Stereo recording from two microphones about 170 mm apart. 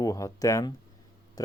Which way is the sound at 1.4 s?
20° left (ahead or behind).